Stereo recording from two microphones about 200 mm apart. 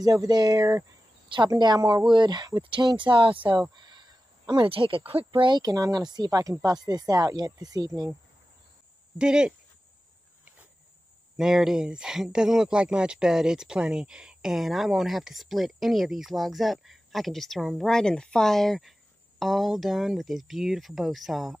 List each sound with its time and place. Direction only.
0.0 s speech: 20° right (ahead or behind)
9.2 s speech: 5° right (ahead or behind)
11.3 s speech: centre (ahead or behind)